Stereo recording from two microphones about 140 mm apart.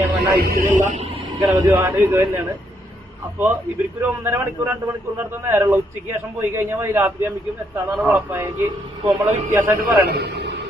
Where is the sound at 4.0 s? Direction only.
15° right (ahead or behind).